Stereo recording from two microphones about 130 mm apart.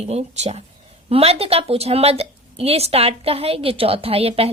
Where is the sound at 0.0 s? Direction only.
55° right (ahead or behind).